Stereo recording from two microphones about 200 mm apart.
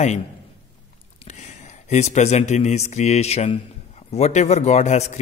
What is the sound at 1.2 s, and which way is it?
A man's voice, 35° left (ahead or behind).